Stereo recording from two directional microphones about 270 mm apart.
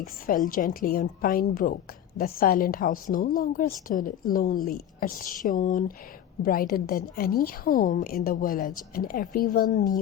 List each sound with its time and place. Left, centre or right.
0.0 s speech: left